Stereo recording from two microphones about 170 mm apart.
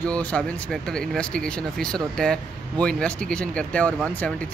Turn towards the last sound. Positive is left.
turn(degrees=5)  # may be behind; listen again after turning